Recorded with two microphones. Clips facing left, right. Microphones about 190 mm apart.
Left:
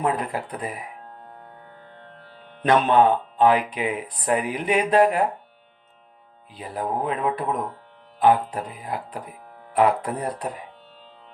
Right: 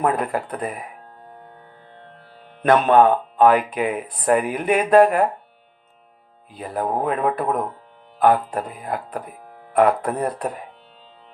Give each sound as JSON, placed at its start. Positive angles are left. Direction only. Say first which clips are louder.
{"t": 0.0, "sound": "speech", "louder": "right 3 dB", "side_deg": -50}
{"t": 2.6, "sound": "speech", "louder": "right 3 dB", "side_deg": -50}
{"t": 6.5, "sound": "speech", "louder": "right 3 dB", "side_deg": -50}